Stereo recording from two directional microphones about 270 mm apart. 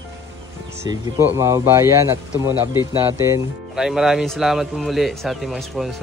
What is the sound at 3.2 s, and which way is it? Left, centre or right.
Speech, centre.